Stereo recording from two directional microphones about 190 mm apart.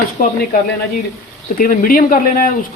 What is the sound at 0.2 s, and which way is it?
Speech, 45° left (ahead or behind).